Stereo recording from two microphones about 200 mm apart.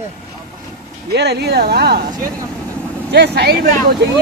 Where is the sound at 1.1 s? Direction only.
55° right (ahead or behind).